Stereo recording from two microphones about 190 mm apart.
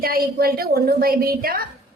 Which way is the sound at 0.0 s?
50° right (ahead or behind).